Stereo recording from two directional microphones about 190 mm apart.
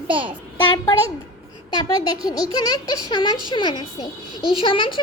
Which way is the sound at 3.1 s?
25° left (ahead or behind).